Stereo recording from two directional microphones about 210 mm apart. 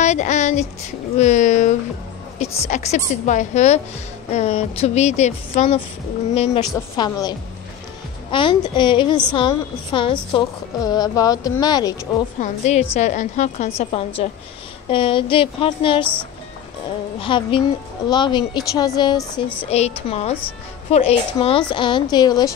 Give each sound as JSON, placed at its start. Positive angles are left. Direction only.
{"t": 0.0, "sound": "a woman's voice", "side_deg": 35}
{"t": 12.4, "sound": "a woman's voice", "side_deg": 35}
{"t": 17.2, "sound": "speech", "side_deg": 25}